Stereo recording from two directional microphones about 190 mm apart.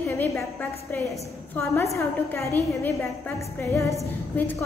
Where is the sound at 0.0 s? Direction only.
15° left (ahead or behind).